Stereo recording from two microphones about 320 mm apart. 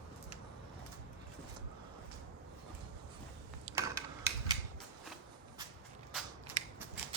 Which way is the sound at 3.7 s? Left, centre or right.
Centre.